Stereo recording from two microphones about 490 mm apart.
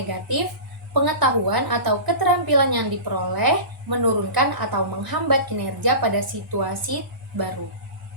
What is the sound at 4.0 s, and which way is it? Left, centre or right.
A woman's voice, right.